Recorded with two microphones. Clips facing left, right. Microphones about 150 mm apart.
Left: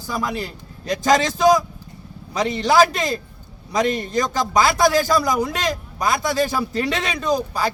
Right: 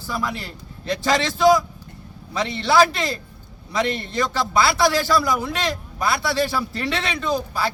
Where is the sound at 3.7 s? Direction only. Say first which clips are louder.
Left 3 dB; 45° left (ahead or behind).